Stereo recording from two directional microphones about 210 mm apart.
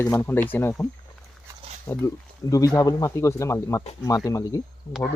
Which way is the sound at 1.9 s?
15° left (ahead or behind).